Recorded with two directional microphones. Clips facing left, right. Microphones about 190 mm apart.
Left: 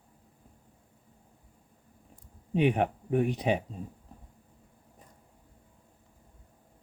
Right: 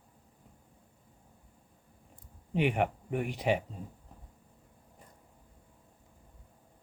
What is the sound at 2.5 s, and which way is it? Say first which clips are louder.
Speech: left 3 dB; 20° left (ahead or behind).